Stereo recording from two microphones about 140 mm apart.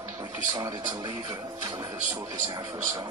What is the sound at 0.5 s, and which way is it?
Speech, 30° right (ahead or behind).